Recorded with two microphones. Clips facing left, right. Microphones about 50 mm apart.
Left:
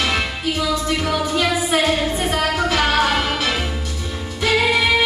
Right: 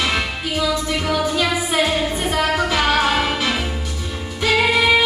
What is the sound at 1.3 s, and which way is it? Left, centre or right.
Music, centre.